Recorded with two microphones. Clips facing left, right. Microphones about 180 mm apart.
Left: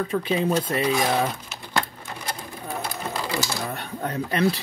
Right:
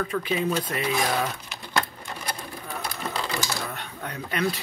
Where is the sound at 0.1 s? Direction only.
30° left (ahead or behind).